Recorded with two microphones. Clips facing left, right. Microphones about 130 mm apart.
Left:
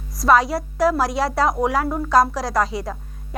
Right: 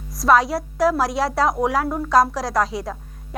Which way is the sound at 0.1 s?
Centre (ahead or behind).